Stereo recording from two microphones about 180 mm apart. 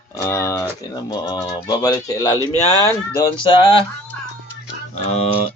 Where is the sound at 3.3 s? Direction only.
30° left (ahead or behind).